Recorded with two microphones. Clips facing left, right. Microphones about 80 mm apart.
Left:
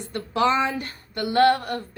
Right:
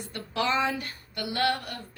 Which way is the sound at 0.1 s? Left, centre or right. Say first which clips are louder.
Left 7 dB; left.